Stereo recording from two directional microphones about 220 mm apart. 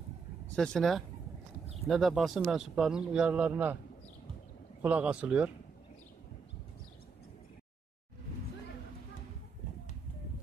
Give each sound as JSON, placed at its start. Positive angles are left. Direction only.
{"t": 0.6, "sound": "speech", "side_deg": 0}
{"t": 4.8, "sound": "speech", "side_deg": -5}